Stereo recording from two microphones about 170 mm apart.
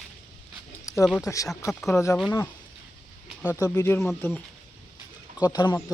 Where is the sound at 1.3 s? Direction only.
20° left (ahead or behind).